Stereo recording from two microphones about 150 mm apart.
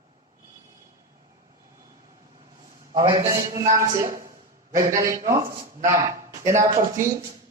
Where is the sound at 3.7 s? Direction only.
20° right (ahead or behind).